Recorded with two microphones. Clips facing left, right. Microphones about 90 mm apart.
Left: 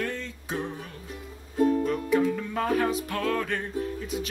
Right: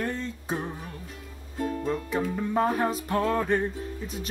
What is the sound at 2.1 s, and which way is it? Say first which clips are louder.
Music: left 1 dB; 25° right (ahead or behind).